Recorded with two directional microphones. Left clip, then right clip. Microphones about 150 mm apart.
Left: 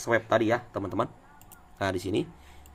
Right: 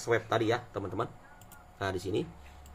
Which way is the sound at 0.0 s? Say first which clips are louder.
Left 4 dB; 50° left (ahead or behind).